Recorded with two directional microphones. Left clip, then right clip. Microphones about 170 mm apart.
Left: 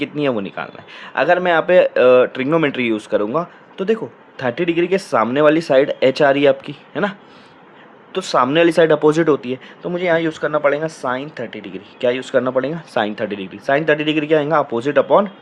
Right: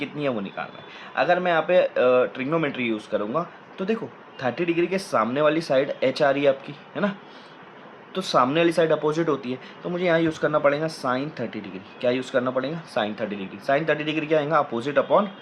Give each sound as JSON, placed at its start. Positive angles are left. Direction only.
{"t": 0.0, "sound": "speech", "side_deg": 60}